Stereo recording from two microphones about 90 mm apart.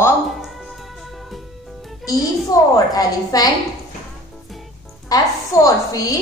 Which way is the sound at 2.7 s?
45° left (ahead or behind).